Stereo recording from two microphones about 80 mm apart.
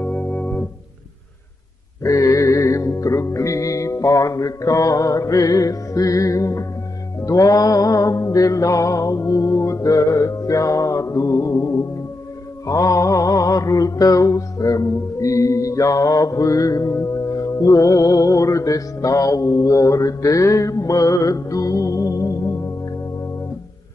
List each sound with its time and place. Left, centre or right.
0.0 s organ: left
2.0 s music: left
7.2 s mantra: left